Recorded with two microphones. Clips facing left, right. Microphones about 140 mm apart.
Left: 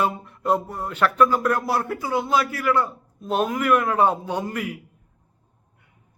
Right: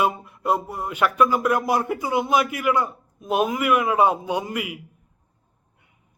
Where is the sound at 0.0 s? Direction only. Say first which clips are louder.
Right 1 dB; 10° right (ahead or behind).